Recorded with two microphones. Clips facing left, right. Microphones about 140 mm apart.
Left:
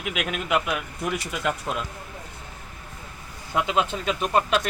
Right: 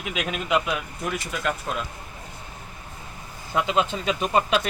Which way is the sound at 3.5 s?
5° left (ahead or behind).